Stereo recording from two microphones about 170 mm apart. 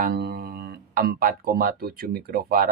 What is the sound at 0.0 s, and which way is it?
Music, 65° right (ahead or behind).